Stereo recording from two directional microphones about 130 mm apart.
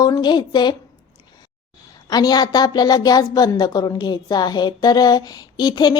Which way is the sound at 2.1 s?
30° left (ahead or behind).